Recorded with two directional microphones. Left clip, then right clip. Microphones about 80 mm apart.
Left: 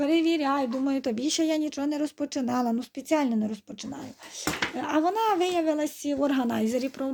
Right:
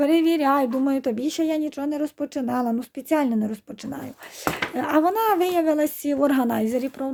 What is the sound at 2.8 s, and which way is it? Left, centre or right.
Speech, right.